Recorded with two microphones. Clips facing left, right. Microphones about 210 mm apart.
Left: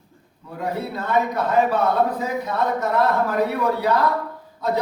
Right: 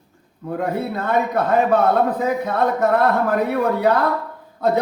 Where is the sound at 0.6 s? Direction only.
55° right (ahead or behind).